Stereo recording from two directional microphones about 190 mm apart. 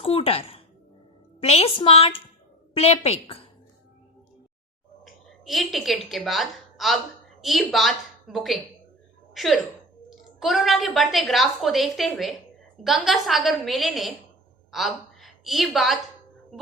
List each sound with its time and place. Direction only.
0.0 s a sound: 30° left (ahead or behind)
1.4 s a woman's voice: 30° left (ahead or behind)
5.0 s a woman's voice: centre (ahead or behind)